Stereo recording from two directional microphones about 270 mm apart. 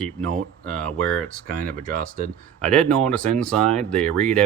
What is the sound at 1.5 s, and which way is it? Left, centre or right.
Speech, right.